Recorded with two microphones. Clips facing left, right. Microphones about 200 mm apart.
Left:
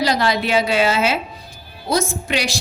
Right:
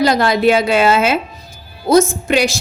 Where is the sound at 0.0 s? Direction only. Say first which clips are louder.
Right 6 dB; 50° right (ahead or behind).